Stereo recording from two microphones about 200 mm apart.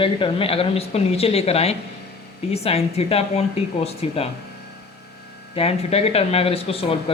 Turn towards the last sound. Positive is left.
turn(degrees=30)  # may be behind; listen again after turning